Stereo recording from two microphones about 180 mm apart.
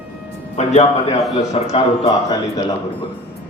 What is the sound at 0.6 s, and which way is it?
A man's voice, 40° left (ahead or behind).